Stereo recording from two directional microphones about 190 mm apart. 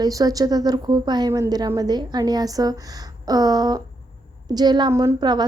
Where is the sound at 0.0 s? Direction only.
20° right (ahead or behind).